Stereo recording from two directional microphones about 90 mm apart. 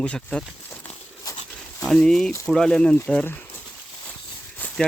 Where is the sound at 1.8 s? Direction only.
5° left (ahead or behind).